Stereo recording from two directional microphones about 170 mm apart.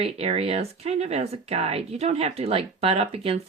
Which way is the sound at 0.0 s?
35° right (ahead or behind).